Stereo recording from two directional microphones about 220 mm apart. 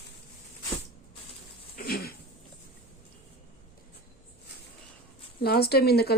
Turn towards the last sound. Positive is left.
turn(degrees=45)  # may be behind; listen again after turning